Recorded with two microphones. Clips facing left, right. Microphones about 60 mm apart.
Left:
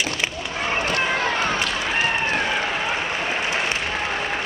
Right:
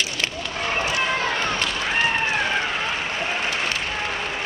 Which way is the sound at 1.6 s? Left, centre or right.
Centre.